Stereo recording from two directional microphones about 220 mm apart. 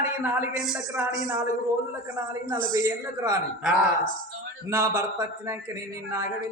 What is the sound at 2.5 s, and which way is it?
Speech, 15° right (ahead or behind).